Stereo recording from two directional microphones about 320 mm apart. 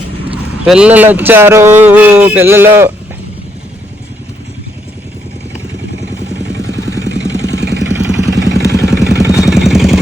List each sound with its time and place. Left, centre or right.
0.6 s speech: centre
6.4 s vehicle: right
8.5 s vehicle: centre